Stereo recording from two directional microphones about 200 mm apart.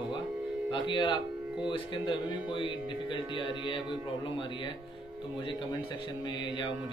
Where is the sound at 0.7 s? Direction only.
25° left (ahead or behind).